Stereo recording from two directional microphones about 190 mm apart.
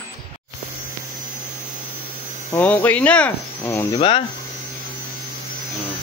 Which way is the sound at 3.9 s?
30° left (ahead or behind).